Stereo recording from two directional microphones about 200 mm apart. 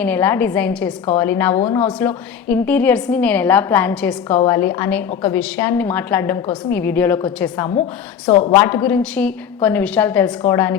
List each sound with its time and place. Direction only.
0.0 s a woman's voice: 5° left (ahead or behind)